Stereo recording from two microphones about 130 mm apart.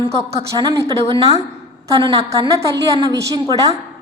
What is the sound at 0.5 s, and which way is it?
A woman's voice, 25° right (ahead or behind).